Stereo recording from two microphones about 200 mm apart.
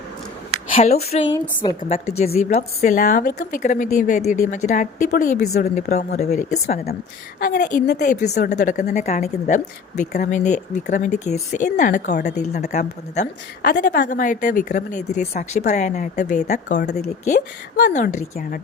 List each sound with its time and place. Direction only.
1.1 s a woman's voice: 35° left (ahead or behind)
7.3 s a woman's voice: 50° left (ahead or behind)
17.9 s a woman's voice: 35° left (ahead or behind)